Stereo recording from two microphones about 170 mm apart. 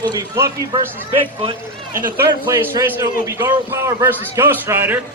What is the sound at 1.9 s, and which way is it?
Speech, 55° right (ahead or behind).